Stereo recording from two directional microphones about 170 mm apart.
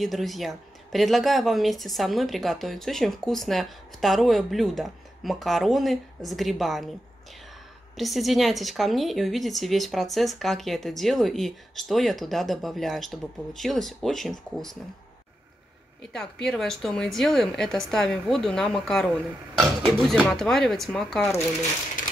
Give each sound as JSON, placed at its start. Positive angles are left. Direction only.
{"t": 0.0, "sound": "speech", "side_deg": 0}
{"t": 8.0, "sound": "speech", "side_deg": 0}
{"t": 16.1, "sound": "speech", "side_deg": 5}